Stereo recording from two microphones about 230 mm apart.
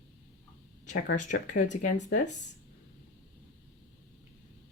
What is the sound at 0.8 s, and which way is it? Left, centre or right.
Speech, left.